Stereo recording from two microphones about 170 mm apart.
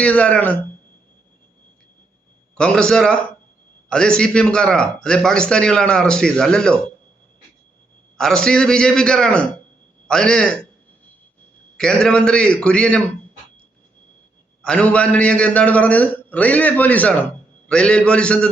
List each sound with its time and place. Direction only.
0.0 s a man's voice: 5° left (ahead or behind)
2.6 s a man's voice: 5° left (ahead or behind)
8.2 s a man's voice: 5° left (ahead or behind)
11.8 s a man's voice: 5° left (ahead or behind)
14.6 s a man's voice: 5° left (ahead or behind)